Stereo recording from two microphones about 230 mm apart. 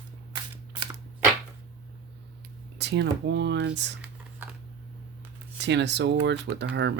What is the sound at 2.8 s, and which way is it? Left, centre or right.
Speech, right.